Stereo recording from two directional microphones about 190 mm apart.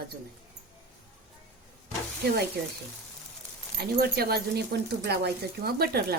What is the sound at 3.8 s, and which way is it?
Speech, 55° right (ahead or behind).